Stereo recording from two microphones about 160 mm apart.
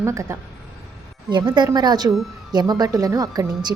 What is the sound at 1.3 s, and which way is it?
A woman's voice, 30° right (ahead or behind).